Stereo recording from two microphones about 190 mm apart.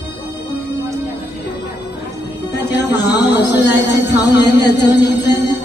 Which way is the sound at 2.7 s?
60° left (ahead or behind).